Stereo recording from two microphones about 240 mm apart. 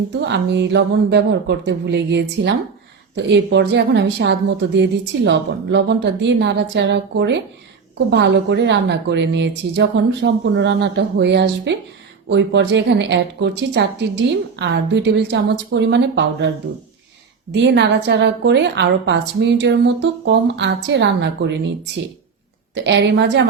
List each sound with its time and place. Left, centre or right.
0.3 s a woman's voice: right
17.5 s a woman's voice: right
22.7 s a woman's voice: right